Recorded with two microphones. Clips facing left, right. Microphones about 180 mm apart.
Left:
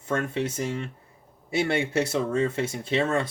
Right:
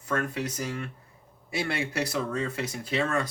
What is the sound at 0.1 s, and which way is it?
Speech, 25° left (ahead or behind).